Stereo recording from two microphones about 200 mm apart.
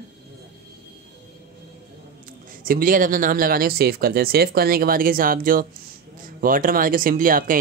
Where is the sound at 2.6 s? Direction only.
45° right (ahead or behind).